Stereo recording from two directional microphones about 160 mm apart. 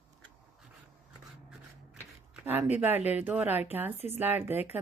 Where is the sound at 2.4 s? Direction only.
10° right (ahead or behind).